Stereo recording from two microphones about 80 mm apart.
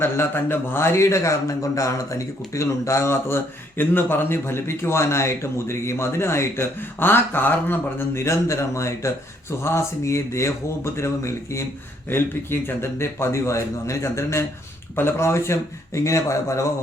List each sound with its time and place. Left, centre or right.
0.0 s a man's voice: left